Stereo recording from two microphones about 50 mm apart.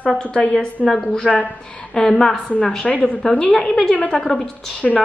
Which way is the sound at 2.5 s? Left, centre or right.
Left.